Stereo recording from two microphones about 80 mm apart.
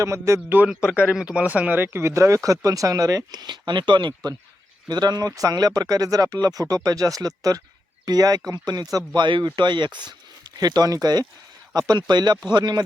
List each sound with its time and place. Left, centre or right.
0.0 s a man's voice: right
0.4 s speech: right
0.9 s speech: centre; by 3.4 s right
3.4 s speech: right
9.2 s speech: right
10.6 s speech: right